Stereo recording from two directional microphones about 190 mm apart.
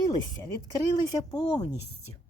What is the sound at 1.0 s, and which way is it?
Speech, 20° left (ahead or behind).